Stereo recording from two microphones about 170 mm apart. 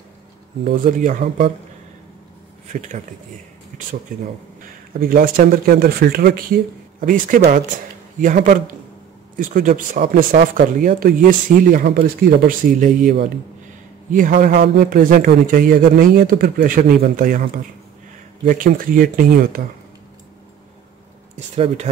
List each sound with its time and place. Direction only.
0.7 s speech: 50° right (ahead or behind)
2.7 s speech: 45° right (ahead or behind)
4.9 s speech: 60° right (ahead or behind)
9.4 s speech: 50° right (ahead or behind)